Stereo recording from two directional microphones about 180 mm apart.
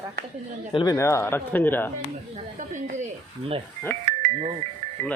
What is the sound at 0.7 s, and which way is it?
Speech, 25° left (ahead or behind).